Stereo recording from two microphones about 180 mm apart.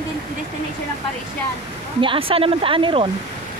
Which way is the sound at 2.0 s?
30° right (ahead or behind).